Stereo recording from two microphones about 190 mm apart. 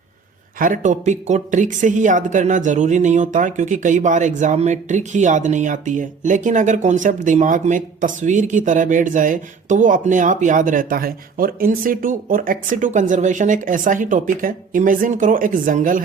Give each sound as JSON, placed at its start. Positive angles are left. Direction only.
{"t": 0.6, "sound": "speech", "side_deg": -40}